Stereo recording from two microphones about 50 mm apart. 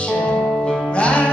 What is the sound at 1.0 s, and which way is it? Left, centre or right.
Music, left.